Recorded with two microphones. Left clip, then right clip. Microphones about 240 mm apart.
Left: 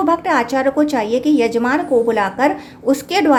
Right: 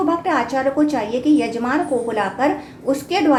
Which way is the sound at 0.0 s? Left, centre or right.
Left.